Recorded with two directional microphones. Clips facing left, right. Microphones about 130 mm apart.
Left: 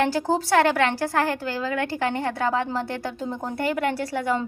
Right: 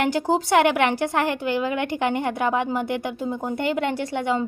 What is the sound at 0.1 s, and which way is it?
A woman's voice, 15° right (ahead or behind).